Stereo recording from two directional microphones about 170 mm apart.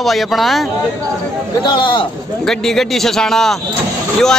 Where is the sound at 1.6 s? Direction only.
30° left (ahead or behind).